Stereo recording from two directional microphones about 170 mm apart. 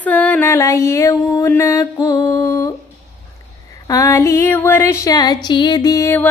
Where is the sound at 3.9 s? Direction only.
20° left (ahead or behind).